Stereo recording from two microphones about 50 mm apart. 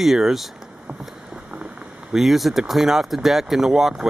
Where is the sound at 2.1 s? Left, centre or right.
Centre.